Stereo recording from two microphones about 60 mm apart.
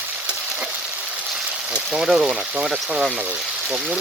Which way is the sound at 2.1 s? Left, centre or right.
Centre.